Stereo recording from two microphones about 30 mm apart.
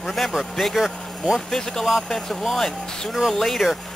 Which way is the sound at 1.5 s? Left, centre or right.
Centre.